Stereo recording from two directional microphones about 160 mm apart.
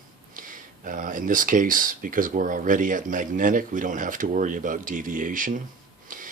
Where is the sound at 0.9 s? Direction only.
55° right (ahead or behind).